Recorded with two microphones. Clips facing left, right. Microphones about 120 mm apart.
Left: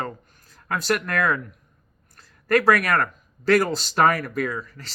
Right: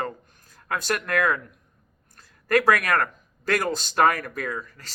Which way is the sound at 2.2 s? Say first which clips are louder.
Left 1 dB; 40° right (ahead or behind).